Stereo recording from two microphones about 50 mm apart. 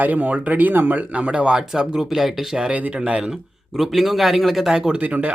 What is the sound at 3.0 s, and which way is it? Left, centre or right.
Speech, centre.